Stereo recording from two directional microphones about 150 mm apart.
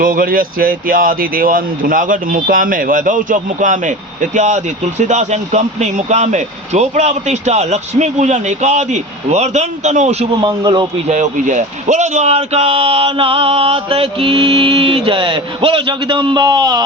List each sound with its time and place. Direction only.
0.0 s speech: 70° right (ahead or behind); by 10.2 s 50° right (ahead or behind)
10.4 s speech: 30° right (ahead or behind)
11.1 s speech: 55° right (ahead or behind); by 16.8 s 25° right (ahead or behind)